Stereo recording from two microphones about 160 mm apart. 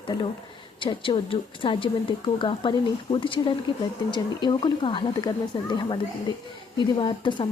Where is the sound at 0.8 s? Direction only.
30° left (ahead or behind).